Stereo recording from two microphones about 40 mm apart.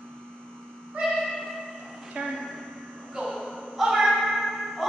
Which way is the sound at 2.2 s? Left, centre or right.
Centre.